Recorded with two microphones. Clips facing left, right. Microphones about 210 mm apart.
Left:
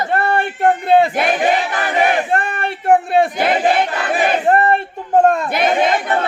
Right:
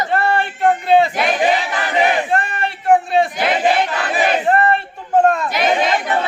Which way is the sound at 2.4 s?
55° left (ahead or behind).